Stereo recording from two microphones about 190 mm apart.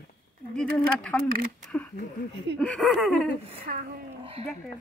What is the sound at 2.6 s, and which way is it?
Laughter, 5° left (ahead or behind).